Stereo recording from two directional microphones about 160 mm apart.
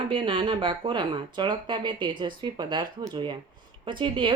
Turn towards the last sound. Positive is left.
turn(degrees=-30)  # may be behind; listen again after turning